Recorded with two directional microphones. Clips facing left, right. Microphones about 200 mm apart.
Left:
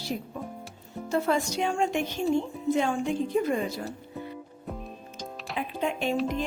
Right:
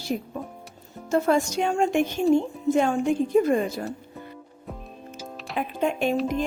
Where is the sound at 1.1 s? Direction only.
45° right (ahead or behind).